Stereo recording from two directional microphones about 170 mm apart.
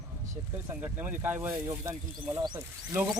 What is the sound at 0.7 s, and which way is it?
Speech, 10° right (ahead or behind).